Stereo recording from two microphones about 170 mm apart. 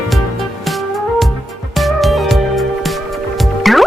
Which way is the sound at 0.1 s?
Centre (ahead or behind).